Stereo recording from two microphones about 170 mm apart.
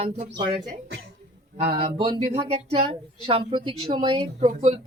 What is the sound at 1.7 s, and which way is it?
Speech, 30° right (ahead or behind).